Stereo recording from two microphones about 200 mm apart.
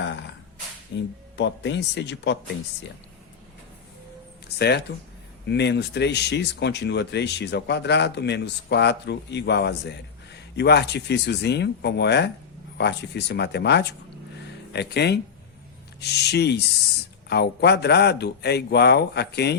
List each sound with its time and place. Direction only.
0.9 s speech: 60° left (ahead or behind)
4.5 s speech: 55° left (ahead or behind)